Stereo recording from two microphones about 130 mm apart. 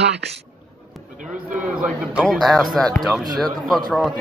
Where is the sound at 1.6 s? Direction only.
5° right (ahead or behind).